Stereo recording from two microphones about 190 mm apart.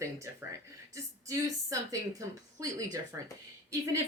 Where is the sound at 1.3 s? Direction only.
15° right (ahead or behind).